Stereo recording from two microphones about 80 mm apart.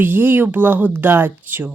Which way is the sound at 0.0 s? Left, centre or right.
Right.